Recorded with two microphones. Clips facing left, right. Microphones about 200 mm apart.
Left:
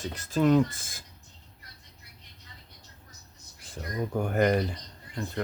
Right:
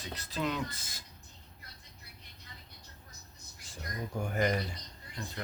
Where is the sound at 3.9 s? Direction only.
55° left (ahead or behind).